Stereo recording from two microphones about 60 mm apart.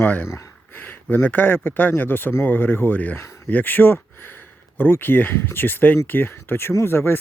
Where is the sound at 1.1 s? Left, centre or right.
Left.